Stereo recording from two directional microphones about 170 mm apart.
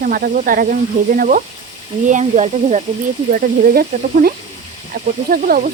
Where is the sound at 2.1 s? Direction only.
45° right (ahead or behind).